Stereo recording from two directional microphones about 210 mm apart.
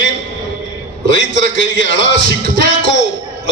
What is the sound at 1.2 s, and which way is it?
A man's voice, 55° left (ahead or behind).